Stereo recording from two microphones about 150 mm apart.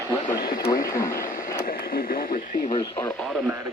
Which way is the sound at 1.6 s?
75° left (ahead or behind).